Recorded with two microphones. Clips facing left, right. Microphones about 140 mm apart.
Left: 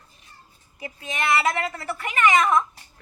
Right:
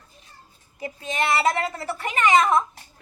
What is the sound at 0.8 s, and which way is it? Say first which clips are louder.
A woman's voice: right 3 dB; 30° right (ahead or behind).